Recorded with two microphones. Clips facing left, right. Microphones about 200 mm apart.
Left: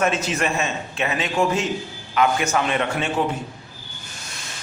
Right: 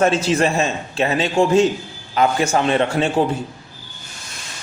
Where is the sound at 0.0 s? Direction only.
30° right (ahead or behind).